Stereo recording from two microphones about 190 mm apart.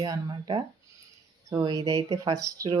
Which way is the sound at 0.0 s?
20° right (ahead or behind).